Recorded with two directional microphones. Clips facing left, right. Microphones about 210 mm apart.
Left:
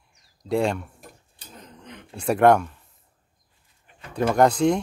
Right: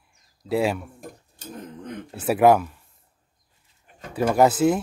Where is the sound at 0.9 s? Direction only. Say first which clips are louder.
Right 7 dB; 45° right (ahead or behind).